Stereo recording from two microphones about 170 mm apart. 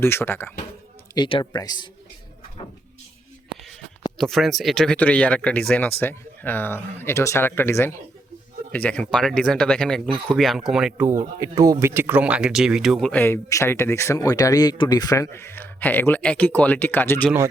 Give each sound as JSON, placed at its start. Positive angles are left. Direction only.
{"t": 0.0, "sound": "speech", "side_deg": 15}
{"t": 1.1, "sound": "speech", "side_deg": 30}
{"t": 3.5, "sound": "a sound", "side_deg": 0}
{"t": 4.2, "sound": "speech", "side_deg": 0}